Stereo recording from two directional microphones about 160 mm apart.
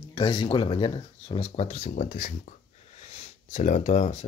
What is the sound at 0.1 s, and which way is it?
Speech, 25° left (ahead or behind).